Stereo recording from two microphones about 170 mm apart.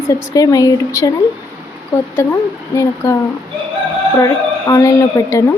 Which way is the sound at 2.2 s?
15° left (ahead or behind).